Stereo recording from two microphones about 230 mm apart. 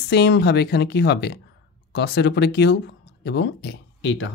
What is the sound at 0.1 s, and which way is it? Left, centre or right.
Speech, left.